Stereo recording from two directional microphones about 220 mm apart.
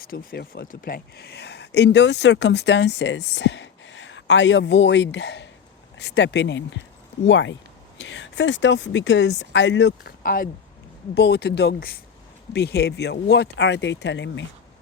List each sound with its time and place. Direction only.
0.0 s speech: 40° left (ahead or behind)